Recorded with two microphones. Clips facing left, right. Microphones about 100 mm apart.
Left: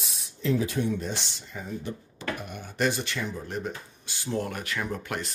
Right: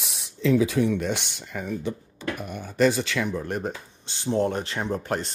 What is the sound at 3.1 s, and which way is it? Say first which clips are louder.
Speech: right 6 dB; 80° right.